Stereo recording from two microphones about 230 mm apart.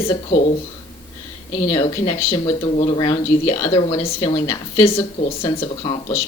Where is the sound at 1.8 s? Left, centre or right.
Centre.